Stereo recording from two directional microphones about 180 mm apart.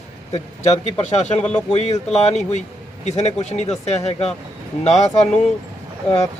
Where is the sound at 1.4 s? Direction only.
5° left (ahead or behind).